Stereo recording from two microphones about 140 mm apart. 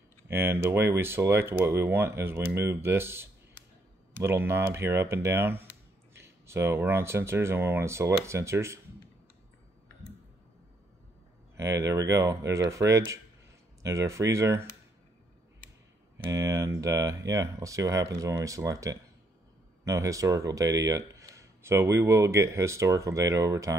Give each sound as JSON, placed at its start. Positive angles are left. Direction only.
{"t": 0.3, "sound": "speech", "side_deg": -15}
{"t": 11.5, "sound": "speech", "side_deg": -20}
{"t": 16.3, "sound": "speech", "side_deg": -20}